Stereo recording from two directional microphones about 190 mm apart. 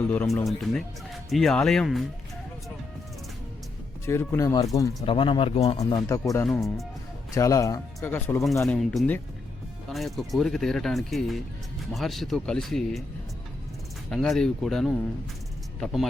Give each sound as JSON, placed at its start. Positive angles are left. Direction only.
{"t": 0.3, "sound": "speech", "side_deg": 0}
{"t": 4.0, "sound": "speech", "side_deg": 15}
{"t": 5.0, "sound": "speech", "side_deg": 25}
{"t": 5.8, "sound": "speech", "side_deg": 20}
{"t": 6.5, "sound": "speech", "side_deg": 0}
{"t": 7.3, "sound": "speech", "side_deg": 15}
{"t": 8.6, "sound": "speech", "side_deg": 0}
{"t": 14.1, "sound": "speech", "side_deg": 5}